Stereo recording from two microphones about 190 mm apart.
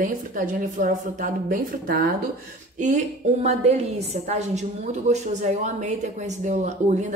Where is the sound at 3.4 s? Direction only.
35° right (ahead or behind).